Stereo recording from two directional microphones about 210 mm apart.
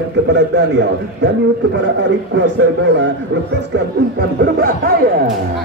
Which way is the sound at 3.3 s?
60° right (ahead or behind).